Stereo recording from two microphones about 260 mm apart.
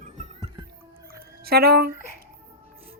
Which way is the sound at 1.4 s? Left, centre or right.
Right.